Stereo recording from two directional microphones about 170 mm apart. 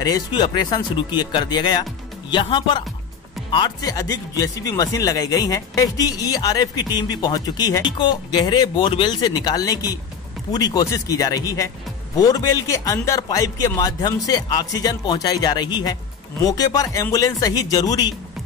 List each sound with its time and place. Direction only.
0.0 s speech: 25° left (ahead or behind)